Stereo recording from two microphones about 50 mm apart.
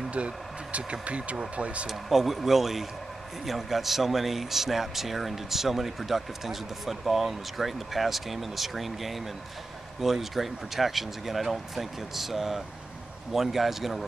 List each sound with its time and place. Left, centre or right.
0.1 s speech: right
1.9 s a man's voice: centre